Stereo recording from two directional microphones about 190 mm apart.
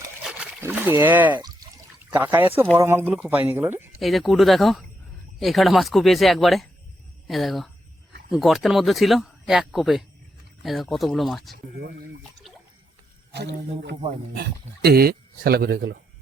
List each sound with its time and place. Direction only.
0.2 s a sound: 5° right (ahead or behind)
2.0 s speech: 10° right (ahead or behind)
13.3 s speech: 60° right (ahead or behind)